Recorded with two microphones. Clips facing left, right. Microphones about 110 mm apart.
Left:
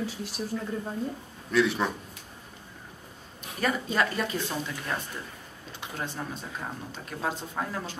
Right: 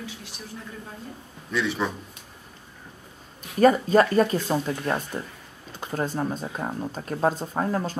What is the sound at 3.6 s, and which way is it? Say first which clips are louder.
Speech: right 10 dB; 40° right (ahead or behind).